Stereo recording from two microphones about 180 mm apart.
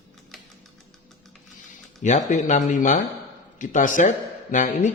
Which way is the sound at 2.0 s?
40° left (ahead or behind).